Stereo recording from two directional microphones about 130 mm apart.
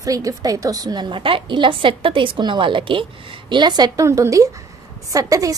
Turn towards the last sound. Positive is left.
turn(degrees=-25)  # may be behind; listen again after turning